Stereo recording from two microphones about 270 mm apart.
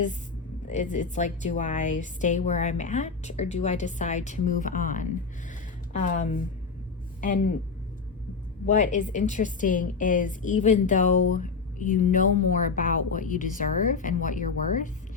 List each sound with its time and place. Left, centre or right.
0.7 s a woman's voice: left
8.6 s a woman's voice: left